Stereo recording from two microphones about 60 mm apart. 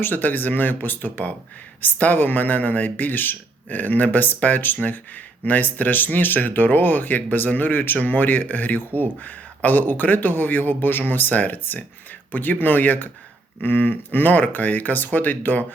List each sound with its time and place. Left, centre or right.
0.0 s speech: left